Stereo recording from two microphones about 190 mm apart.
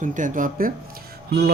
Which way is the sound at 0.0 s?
40° right (ahead or behind).